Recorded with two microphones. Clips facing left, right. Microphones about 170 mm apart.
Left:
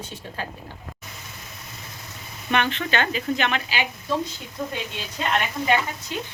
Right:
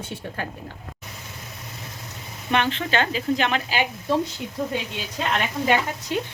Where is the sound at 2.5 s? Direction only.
30° right (ahead or behind).